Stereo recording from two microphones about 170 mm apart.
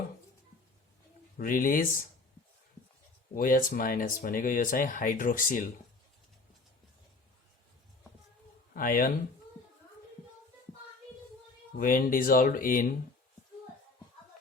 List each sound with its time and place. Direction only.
1.4 s speech: 55° left (ahead or behind)
3.3 s speech: 55° left (ahead or behind)
8.7 s speech: 55° left (ahead or behind)
11.8 s speech: 55° left (ahead or behind)